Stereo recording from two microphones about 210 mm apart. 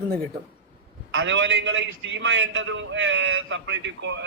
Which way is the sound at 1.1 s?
60° right (ahead or behind).